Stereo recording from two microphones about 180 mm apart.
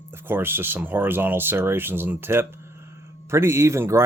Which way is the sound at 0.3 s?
10° right (ahead or behind).